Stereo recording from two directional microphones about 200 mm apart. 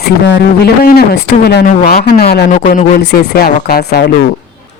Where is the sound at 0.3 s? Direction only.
55° left (ahead or behind).